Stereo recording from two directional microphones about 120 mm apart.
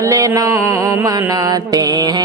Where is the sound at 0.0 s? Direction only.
25° right (ahead or behind).